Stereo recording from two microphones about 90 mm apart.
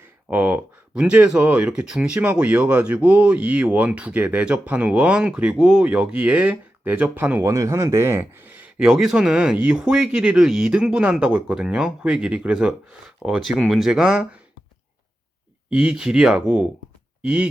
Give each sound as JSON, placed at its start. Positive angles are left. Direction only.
{"t": 0.0, "sound": "speech", "side_deg": -20}
{"t": 7.4, "sound": "speech", "side_deg": -35}
{"t": 8.8, "sound": "speech", "side_deg": -5}
{"t": 15.7, "sound": "speech", "side_deg": -10}